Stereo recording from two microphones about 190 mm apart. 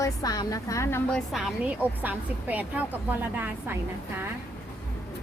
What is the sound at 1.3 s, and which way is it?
A woman's voice, centre (ahead or behind).